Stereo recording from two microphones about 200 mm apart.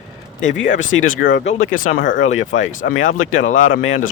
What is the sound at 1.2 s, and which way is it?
Speech, 65° left (ahead or behind).